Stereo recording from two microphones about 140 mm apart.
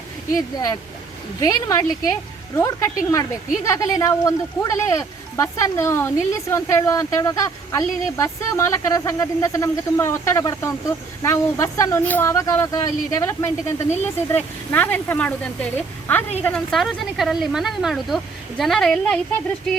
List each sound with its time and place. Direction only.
1.4 s a woman's voice: 25° left (ahead or behind); by 19.2 s 5° left (ahead or behind)